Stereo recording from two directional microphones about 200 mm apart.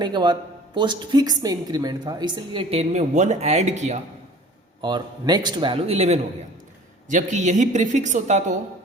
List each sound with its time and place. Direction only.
0.0 s a woman's voice: 20° right (ahead or behind)
4.8 s a woman's voice: 20° right (ahead or behind); by 8.5 s 35° right (ahead or behind)